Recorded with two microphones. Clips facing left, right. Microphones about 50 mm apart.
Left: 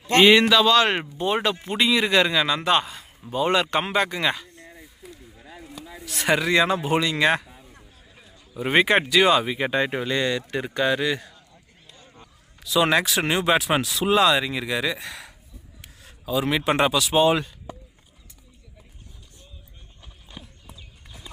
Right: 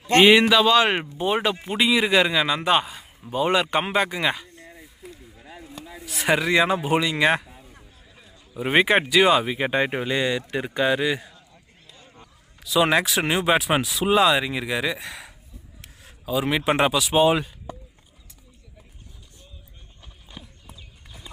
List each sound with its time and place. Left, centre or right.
0.0 s speech: centre
4.4 s a sound: centre
4.7 s a sound: centre
8.5 s speech: centre
9.6 s speech: centre
20.3 s clip-clop: centre